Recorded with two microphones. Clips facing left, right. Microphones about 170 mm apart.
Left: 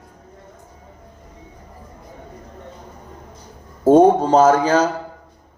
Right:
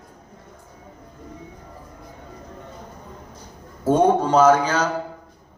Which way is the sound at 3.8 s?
45° left (ahead or behind).